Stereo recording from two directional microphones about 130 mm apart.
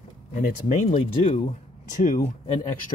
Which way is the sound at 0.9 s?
50° left (ahead or behind).